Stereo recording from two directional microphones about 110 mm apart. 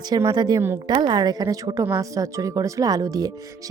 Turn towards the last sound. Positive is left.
turn(degrees=-35)  # may be behind; listen again after turning